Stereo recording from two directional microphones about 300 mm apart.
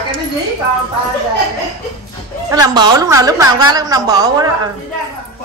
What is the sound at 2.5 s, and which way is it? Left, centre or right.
A woman's voice, centre.